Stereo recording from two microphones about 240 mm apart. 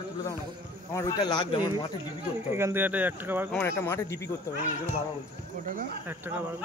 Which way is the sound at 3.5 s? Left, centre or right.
Centre.